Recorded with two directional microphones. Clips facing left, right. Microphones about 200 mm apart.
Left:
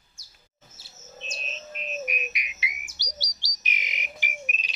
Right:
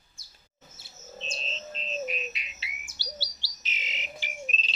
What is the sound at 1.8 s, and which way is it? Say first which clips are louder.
Bird: even; 15° left (ahead or behind).